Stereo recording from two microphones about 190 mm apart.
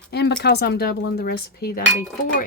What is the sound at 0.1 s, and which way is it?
Speech, 60° left (ahead or behind).